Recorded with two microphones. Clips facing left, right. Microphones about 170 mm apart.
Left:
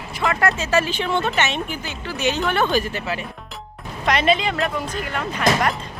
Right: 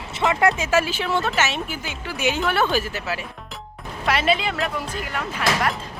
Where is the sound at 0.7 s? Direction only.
5° right (ahead or behind).